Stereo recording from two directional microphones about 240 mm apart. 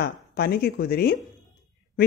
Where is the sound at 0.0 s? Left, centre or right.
Left.